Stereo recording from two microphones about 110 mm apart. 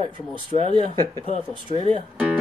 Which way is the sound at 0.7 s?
45° right (ahead or behind).